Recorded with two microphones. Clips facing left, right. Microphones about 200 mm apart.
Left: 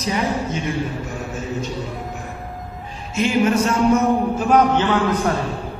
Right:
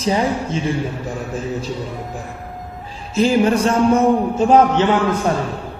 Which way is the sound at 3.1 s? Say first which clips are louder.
Right 3 dB; 35° right (ahead or behind).